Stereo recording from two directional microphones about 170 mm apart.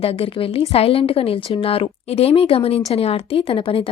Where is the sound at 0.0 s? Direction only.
35° left (ahead or behind).